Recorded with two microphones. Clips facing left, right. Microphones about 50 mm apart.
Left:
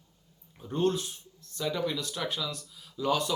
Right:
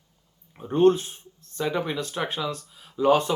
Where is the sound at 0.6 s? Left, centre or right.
Right.